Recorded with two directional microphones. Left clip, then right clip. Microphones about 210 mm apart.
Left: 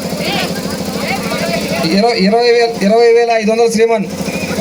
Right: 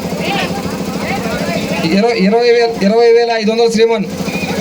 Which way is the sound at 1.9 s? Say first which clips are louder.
Even; 30° right (ahead or behind).